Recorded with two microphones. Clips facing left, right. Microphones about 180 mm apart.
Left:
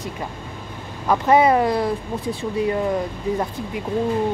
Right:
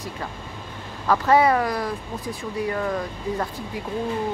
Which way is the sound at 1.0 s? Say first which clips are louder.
Left 2 dB; 20° left (ahead or behind).